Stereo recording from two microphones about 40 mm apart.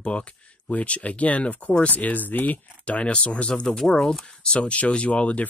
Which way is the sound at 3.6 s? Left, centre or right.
Centre.